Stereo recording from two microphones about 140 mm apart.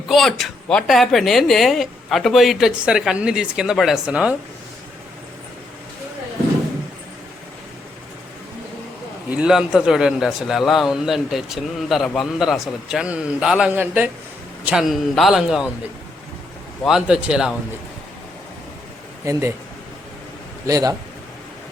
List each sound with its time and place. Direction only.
0.1 s a man's voice: centre (ahead or behind)
9.3 s a man's voice: 5° right (ahead or behind)
16.8 s a man's voice: 5° right (ahead or behind)
19.2 s speech: 20° right (ahead or behind)
20.7 s speech: 25° right (ahead or behind)